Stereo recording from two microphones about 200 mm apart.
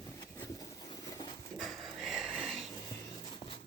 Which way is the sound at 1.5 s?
Centre (ahead or behind).